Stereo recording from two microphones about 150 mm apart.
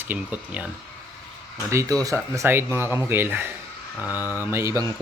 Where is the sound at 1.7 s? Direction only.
20° right (ahead or behind).